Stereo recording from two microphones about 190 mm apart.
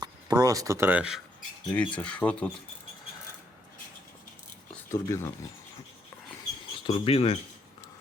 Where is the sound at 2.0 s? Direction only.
5° left (ahead or behind).